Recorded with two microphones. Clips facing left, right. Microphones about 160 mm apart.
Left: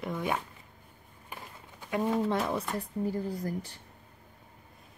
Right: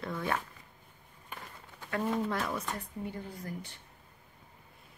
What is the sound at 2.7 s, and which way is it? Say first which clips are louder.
Speech: left 8 dB; 35° left (ahead or behind).